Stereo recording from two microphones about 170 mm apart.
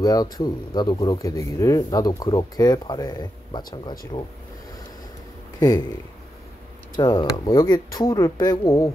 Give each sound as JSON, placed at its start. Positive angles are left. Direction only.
{"t": 0.0, "sound": "speech", "side_deg": 20}
{"t": 5.6, "sound": "speech", "side_deg": 20}
{"t": 7.0, "sound": "speech", "side_deg": 25}